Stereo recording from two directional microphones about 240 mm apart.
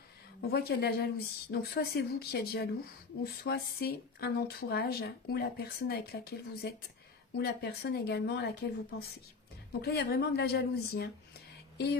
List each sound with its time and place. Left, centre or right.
0.5 s speech: left
9.7 s speech: left